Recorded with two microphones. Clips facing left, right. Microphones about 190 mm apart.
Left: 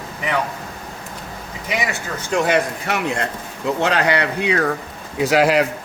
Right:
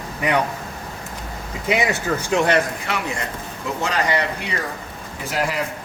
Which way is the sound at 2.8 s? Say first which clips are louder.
Left 4 dB; 55° left (ahead or behind).